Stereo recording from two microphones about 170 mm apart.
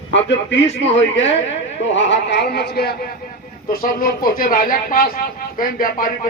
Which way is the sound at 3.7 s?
60° left (ahead or behind).